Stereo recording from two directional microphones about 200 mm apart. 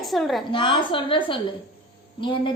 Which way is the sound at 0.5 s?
25° left (ahead or behind).